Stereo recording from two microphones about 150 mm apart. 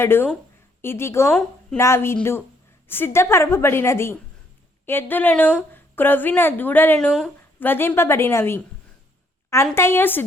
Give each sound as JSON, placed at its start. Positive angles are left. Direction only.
{"t": 0.0, "sound": "a woman's voice", "side_deg": 15}
{"t": 1.3, "sound": "a woman's voice", "side_deg": 5}
{"t": 1.8, "sound": "a woman's voice", "side_deg": 15}
{"t": 9.7, "sound": "a woman's voice", "side_deg": 15}